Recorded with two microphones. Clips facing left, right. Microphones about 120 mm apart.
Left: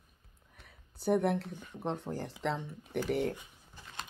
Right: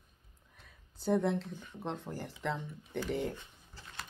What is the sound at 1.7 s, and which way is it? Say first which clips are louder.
Speech: left 4 dB; 15° left (ahead or behind).